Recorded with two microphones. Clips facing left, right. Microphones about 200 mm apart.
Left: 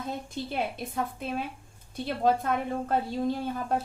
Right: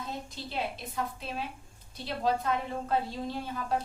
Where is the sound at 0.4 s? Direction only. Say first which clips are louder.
Left 7 dB; 50° left (ahead or behind).